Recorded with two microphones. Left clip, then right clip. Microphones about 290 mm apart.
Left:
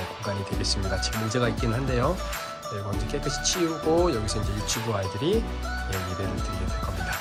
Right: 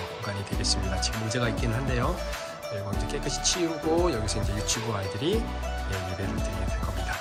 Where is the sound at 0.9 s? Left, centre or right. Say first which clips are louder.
Left 2 dB; centre.